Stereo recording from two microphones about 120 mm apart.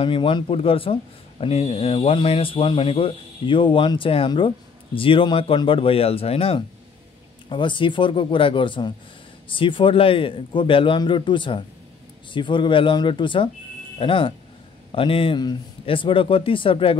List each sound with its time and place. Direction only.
0.0 s speech: 45° left (ahead or behind)
7.4 s speech: 45° left (ahead or behind)